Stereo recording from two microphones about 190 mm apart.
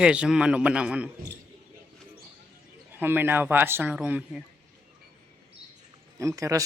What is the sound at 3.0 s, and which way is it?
A man's voice, 10° right (ahead or behind).